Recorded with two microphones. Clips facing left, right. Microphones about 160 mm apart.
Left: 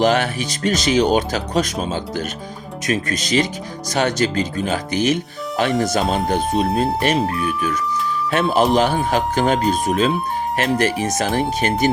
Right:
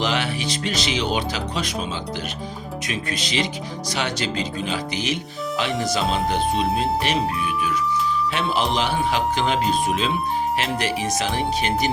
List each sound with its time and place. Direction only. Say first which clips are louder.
0.0 s speech: left 7 dB; 50° left (ahead or behind)
8.3 s speech: left 11 dB; 45° left (ahead or behind)